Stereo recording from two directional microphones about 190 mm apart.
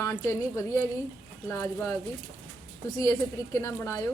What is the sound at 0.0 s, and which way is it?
A woman's voice, 15° left (ahead or behind).